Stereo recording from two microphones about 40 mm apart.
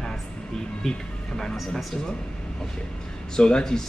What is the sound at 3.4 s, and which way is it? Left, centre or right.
Speech, left.